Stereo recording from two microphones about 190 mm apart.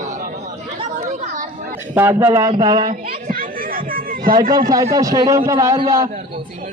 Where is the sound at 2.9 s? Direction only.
50° right (ahead or behind).